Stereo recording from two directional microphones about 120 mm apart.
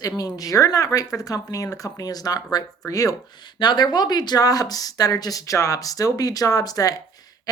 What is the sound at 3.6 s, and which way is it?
A woman's voice, 40° left (ahead or behind).